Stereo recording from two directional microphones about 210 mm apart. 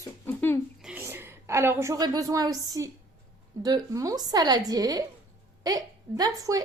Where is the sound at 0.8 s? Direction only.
5° right (ahead or behind).